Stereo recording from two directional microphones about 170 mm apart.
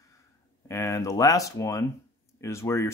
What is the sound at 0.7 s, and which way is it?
Speech, 15° left (ahead or behind).